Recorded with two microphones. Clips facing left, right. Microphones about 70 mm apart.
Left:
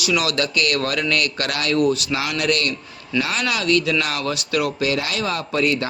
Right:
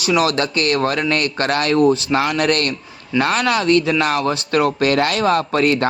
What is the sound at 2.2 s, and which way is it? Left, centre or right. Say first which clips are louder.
Speech: right 4 dB; right.